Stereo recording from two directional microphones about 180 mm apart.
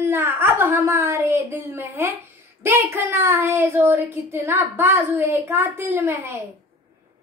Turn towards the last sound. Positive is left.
turn(degrees=-15)  # may be behind; listen again after turning